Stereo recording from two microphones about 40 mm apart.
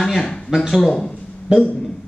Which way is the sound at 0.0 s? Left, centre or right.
Centre.